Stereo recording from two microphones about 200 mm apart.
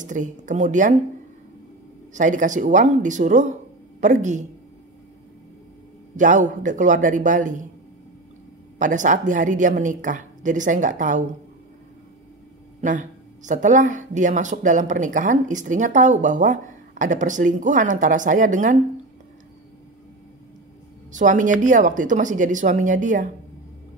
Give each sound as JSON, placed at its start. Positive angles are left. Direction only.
{"t": 0.0, "sound": "speech", "side_deg": -40}
{"t": 2.1, "sound": "speech", "side_deg": -40}
{"t": 6.1, "sound": "speech", "side_deg": -40}
{"t": 8.7, "sound": "speech", "side_deg": -40}
{"t": 12.8, "sound": "speech", "side_deg": -40}
{"t": 21.1, "sound": "speech", "side_deg": -40}